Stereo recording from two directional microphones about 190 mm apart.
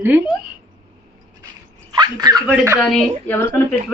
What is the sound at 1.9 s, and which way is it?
Speech, 20° right (ahead or behind).